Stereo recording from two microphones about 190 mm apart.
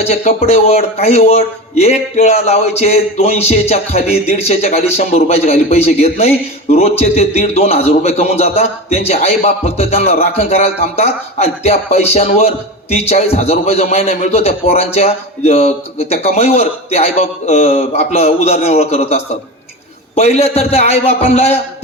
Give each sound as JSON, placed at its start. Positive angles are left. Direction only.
{"t": 0.0, "sound": "a man's voice", "side_deg": 35}